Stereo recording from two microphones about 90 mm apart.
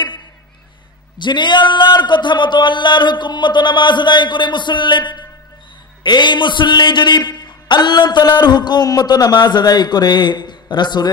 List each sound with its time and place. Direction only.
1.1 s a man's voice: 60° left (ahead or behind)